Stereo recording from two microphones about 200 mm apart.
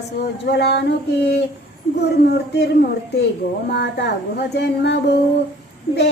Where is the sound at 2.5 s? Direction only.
55° left (ahead or behind).